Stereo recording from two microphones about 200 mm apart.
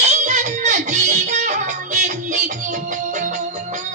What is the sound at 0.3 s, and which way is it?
Music, 35° right (ahead or behind).